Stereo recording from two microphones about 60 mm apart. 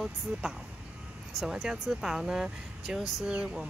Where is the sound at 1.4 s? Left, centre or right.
Centre.